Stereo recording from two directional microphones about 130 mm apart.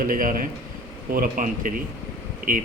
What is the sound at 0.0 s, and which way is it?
Speech, 90° right.